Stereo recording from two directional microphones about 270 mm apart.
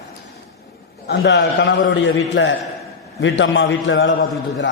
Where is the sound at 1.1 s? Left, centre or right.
Left.